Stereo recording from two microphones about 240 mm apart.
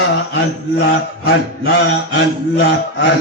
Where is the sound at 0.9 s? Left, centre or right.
Left.